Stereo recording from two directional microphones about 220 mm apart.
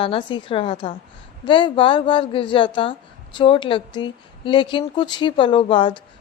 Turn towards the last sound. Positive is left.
turn(degrees=20)  # may be behind; listen again after turning